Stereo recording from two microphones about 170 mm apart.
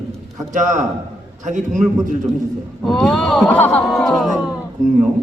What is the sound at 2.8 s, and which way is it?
Speech, centre (ahead or behind).